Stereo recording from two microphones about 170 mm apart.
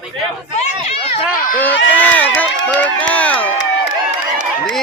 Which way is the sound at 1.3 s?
55° left (ahead or behind).